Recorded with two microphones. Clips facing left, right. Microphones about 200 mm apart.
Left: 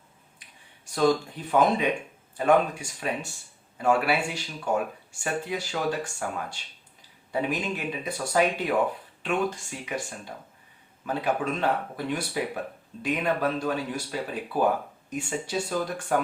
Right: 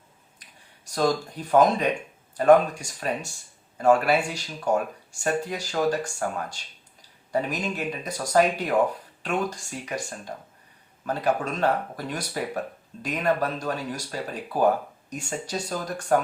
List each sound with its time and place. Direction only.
0.9 s speech: 40° right (ahead or behind)